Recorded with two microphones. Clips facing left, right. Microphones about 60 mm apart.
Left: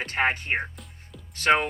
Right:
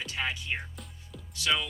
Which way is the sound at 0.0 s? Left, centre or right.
Left.